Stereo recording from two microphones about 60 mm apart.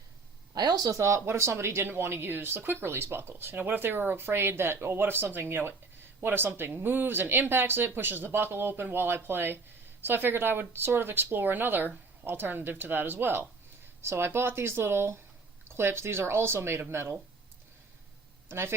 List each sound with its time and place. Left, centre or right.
0.6 s speech: right
18.4 s speech: right